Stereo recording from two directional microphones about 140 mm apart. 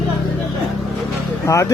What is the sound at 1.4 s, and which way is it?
Speech, 20° left (ahead or behind).